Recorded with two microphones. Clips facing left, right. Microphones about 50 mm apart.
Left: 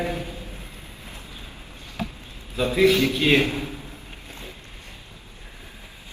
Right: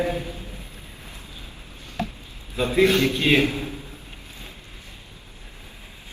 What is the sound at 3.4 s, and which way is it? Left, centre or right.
Speech, left.